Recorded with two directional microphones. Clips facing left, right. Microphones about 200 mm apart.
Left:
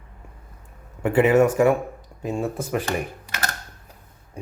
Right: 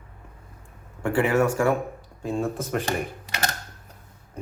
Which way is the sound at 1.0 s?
20° left (ahead or behind).